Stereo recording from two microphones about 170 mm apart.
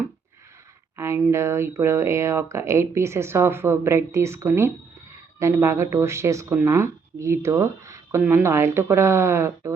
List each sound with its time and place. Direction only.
0.9 s speech: 15° right (ahead or behind)